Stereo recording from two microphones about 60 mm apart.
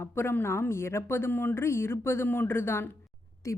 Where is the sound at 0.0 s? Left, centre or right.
Left.